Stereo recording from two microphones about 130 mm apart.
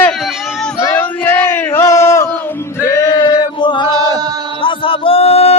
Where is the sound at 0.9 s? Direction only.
10° left (ahead or behind); by 4.2 s 35° left (ahead or behind).